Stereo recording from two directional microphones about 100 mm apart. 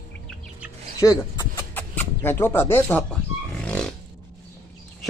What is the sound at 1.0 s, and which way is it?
Speech, 35° left (ahead or behind).